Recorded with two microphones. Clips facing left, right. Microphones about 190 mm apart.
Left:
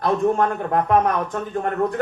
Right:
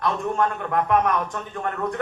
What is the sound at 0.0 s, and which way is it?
A man's voice, 35° left (ahead or behind).